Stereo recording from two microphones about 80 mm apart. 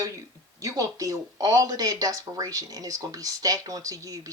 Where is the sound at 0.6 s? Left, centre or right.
Right.